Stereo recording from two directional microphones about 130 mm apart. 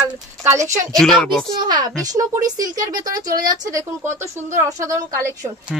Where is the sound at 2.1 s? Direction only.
30° right (ahead or behind).